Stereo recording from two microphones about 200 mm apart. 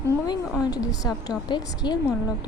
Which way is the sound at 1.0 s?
20° left (ahead or behind).